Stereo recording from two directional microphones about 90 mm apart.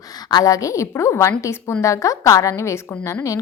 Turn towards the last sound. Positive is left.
turn(degrees=35)  # may be behind; listen again after turning